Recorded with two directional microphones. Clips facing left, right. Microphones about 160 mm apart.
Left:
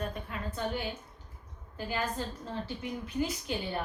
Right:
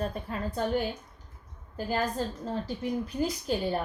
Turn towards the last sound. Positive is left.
turn(degrees=-40)  # may be behind; listen again after turning